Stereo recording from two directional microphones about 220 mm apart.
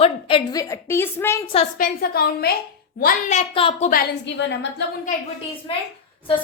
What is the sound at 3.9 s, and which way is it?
Speech, 45° left (ahead or behind).